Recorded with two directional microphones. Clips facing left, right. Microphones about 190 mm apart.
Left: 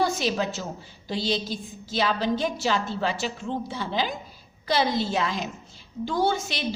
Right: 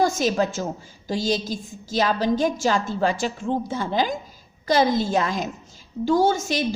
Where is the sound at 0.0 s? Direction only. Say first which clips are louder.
Right 4 dB; 45° right (ahead or behind).